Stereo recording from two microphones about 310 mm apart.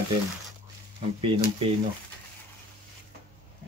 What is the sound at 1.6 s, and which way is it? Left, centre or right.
Speech, centre.